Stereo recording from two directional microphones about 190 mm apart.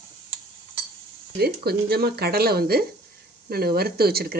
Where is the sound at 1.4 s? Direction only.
55° right (ahead or behind).